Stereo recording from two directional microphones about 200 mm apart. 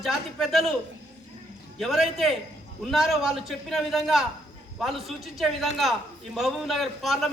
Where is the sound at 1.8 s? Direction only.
Centre (ahead or behind).